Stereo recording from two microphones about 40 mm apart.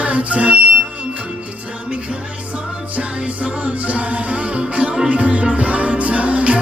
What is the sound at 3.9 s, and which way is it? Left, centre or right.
Music, right.